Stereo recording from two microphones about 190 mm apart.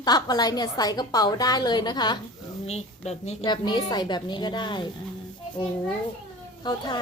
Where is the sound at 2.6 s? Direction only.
35° left (ahead or behind).